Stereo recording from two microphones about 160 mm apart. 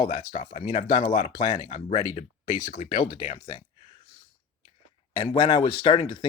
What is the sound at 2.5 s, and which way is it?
Speech, 50° left (ahead or behind).